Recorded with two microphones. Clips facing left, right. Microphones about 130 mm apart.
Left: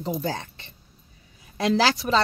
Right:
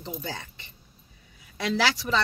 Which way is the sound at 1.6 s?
40° left (ahead or behind).